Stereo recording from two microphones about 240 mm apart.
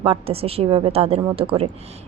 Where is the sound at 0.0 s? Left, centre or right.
Right.